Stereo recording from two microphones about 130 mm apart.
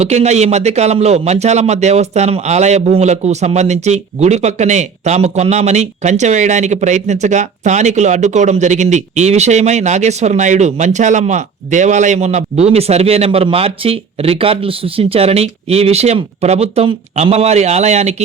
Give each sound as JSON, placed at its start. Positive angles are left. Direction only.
{"t": 0.0, "sound": "a man's voice", "side_deg": -60}